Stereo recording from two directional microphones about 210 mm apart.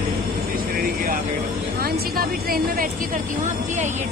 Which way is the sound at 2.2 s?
45° right (ahead or behind).